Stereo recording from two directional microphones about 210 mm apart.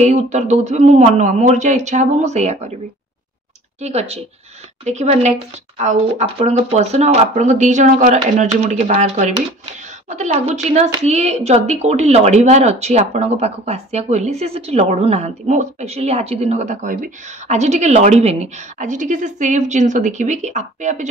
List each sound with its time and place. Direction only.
0.0 s speech: 35° right (ahead or behind)
3.8 s speech: 30° right (ahead or behind)